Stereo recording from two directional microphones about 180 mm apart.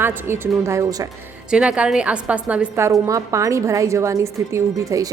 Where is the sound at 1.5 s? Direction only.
5° right (ahead or behind).